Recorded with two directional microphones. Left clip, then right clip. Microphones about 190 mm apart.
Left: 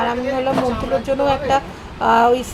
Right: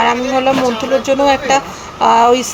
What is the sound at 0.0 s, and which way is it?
Speech, 20° right (ahead or behind).